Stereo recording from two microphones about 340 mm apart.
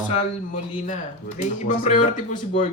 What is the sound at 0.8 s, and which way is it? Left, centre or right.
Speech, left.